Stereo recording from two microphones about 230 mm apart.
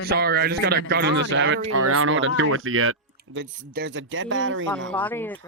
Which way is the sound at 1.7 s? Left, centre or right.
Right.